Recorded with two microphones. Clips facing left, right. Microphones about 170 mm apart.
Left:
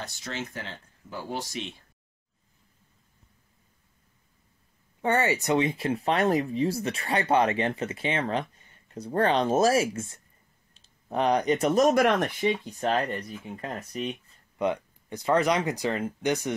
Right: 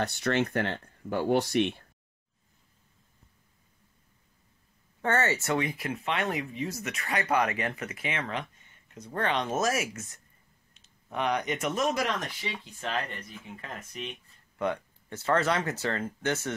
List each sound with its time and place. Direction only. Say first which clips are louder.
0.0 s speech: right 9 dB; 60° right (ahead or behind)
5.0 s speech: left 3 dB; 15° left (ahead or behind); by 12.0 s 40° left (ahead or behind)
12.0 s speech: left 9 dB; 55° left (ahead or behind); by 14.1 s 40° left (ahead or behind)
14.6 s speech: left 3 dB; 15° left (ahead or behind)